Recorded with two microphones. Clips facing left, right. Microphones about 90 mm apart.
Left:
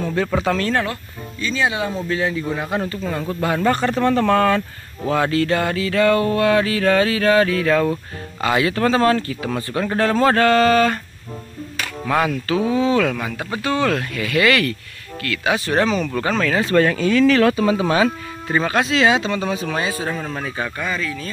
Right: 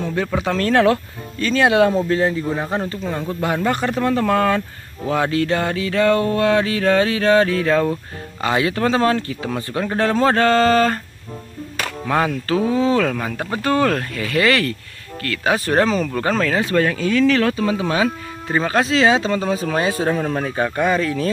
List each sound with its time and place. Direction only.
0.0 s speech: 15° right (ahead or behind)
0.6 s speech: 65° right (ahead or behind)
2.0 s speech: 40° right (ahead or behind)
2.5 s speech: 30° right (ahead or behind)
3.0 s speech: 20° right (ahead or behind); by 11.0 s 35° right (ahead or behind)
12.1 s speech: 25° right (ahead or behind)
16.7 s speech: centre (ahead or behind)
18.7 s speech: 30° right (ahead or behind); by 21.3 s 55° right (ahead or behind)